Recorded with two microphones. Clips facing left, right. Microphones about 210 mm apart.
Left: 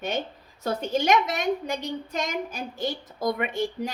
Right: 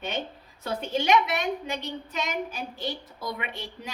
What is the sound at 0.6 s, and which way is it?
A woman's voice, 45° left (ahead or behind).